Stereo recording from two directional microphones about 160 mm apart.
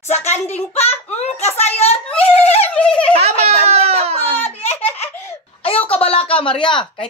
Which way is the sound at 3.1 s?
40° right (ahead or behind).